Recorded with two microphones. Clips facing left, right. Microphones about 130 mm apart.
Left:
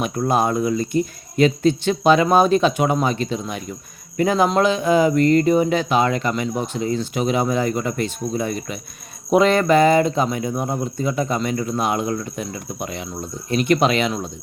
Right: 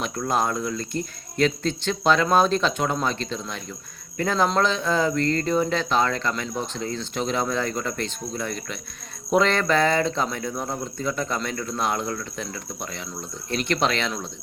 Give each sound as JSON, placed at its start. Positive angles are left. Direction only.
{"t": 0.3, "sound": "speech", "side_deg": 15}